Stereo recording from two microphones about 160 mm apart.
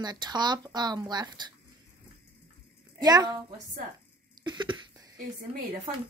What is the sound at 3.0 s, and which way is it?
Speech, 25° right (ahead or behind).